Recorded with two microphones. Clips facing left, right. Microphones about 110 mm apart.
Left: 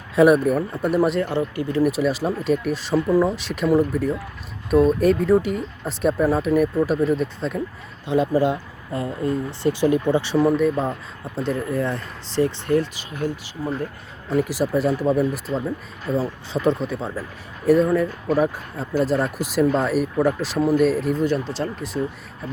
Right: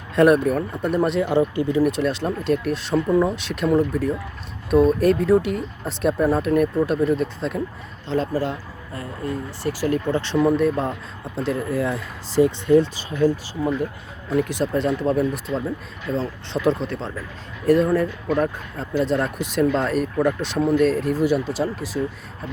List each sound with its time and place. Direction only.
0.2 s speech: 5° left (ahead or behind)
1.2 s speech: 15° right (ahead or behind)
1.8 s speech: 5° left (ahead or behind)
8.0 s speech: 15° left (ahead or behind)
10.3 s speech: centre (ahead or behind)
12.6 s speech: 20° right (ahead or behind)
14.3 s speech: 5° left (ahead or behind)